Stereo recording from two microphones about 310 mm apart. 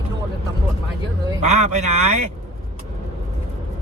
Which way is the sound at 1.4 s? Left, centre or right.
Right.